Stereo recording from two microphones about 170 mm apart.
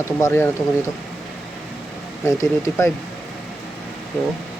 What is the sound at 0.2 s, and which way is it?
Speech, 15° left (ahead or behind).